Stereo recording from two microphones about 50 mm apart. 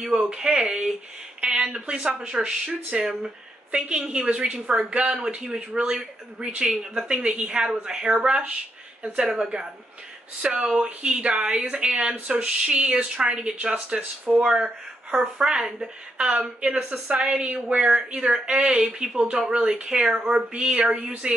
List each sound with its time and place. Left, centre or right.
0.3 s speech: centre
10.4 s speech: centre
18.5 s speech: right